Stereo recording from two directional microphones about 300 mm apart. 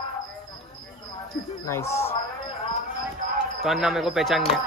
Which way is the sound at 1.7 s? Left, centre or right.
Centre.